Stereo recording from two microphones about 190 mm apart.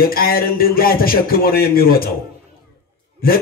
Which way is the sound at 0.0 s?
50° left (ahead or behind).